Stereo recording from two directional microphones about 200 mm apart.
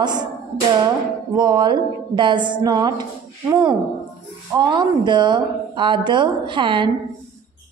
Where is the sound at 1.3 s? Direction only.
20° right (ahead or behind).